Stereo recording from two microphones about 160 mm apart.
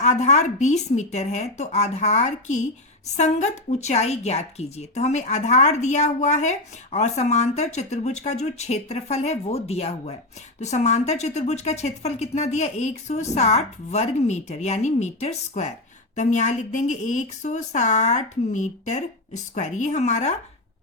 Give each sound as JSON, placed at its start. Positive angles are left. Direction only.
{"t": 0.0, "sound": "a woman's voice", "side_deg": 45}